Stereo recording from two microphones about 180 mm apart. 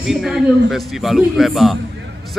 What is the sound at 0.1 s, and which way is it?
Speech, centre (ahead or behind).